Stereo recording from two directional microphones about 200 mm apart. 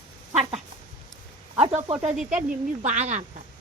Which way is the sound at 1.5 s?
30° right (ahead or behind).